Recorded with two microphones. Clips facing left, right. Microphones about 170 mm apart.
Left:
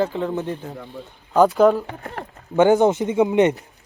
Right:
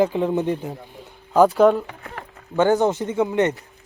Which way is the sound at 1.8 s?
40° left (ahead or behind).